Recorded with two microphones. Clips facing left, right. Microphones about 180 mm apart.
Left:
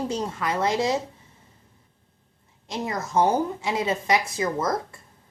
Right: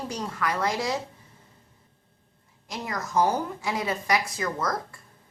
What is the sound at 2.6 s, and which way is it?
A woman's voice, 25° left (ahead or behind).